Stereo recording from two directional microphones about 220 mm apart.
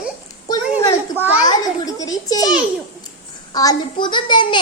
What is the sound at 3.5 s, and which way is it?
A child's voice, 20° left (ahead or behind).